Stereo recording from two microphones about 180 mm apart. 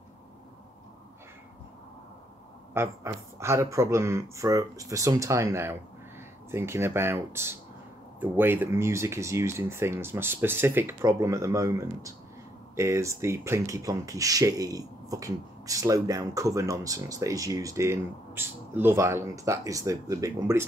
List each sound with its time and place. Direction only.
2.7 s speech: 15° right (ahead or behind)